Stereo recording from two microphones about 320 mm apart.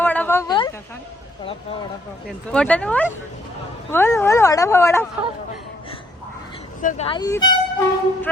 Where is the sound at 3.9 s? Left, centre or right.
Centre.